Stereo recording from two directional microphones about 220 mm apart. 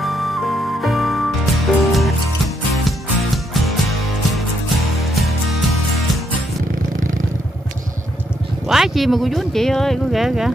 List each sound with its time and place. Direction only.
0.0 s music: centre (ahead or behind)
5.0 s music: centre (ahead or behind)
8.6 s speech: centre (ahead or behind)